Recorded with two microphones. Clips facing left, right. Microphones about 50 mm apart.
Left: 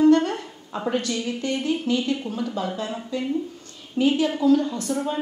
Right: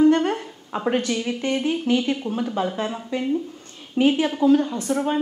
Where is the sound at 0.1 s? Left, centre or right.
Right.